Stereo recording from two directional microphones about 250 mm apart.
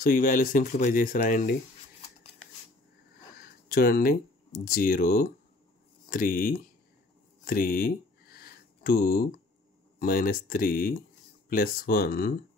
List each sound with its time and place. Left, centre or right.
0.0 s speech: left
3.6 s speech: left
7.4 s a sound: left
9.9 s speech: left